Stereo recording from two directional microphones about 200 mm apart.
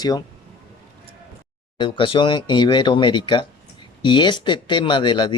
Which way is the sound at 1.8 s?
25° left (ahead or behind).